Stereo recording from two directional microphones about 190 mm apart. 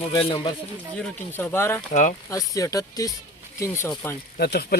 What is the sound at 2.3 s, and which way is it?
Speech, 15° left (ahead or behind).